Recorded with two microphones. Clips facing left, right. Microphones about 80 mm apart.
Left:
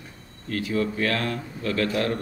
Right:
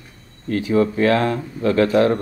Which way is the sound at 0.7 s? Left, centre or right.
Right.